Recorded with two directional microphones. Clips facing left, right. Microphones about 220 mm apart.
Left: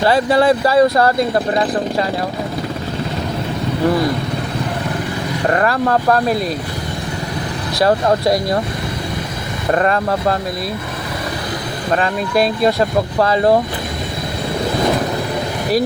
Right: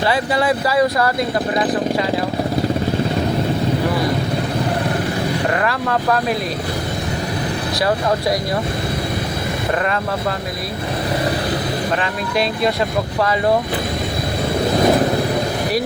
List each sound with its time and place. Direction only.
0.1 s speech: 40° left (ahead or behind)
5.5 s speech: 40° left (ahead or behind)
9.7 s speech: 40° left (ahead or behind)
13.1 s speech: 35° left (ahead or behind)